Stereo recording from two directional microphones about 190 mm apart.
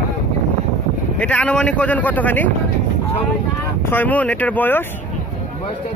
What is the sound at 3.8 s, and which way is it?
Speech, 10° left (ahead or behind).